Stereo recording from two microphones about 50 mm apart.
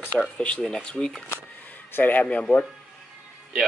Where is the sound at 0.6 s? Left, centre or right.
Centre.